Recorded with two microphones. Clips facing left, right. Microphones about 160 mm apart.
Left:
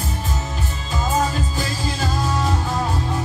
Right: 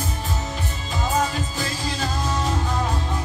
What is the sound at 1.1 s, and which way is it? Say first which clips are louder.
Music: left 2 dB; 40° left (ahead or behind).